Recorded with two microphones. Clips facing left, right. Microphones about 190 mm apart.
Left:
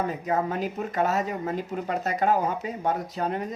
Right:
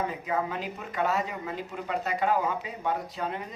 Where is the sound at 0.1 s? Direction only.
40° left (ahead or behind).